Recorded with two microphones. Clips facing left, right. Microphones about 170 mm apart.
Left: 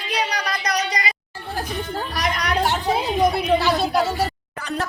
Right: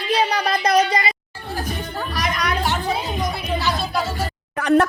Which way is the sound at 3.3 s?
65° left (ahead or behind).